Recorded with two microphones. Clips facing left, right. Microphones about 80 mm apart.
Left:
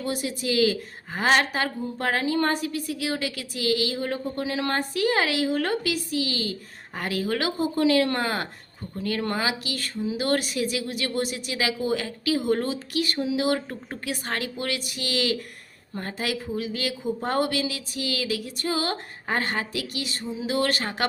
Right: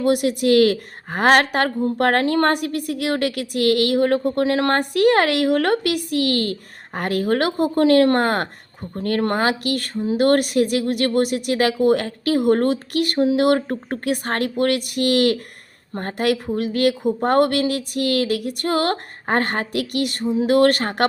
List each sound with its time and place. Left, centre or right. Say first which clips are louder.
0.0 s a woman's voice: right 11 dB; right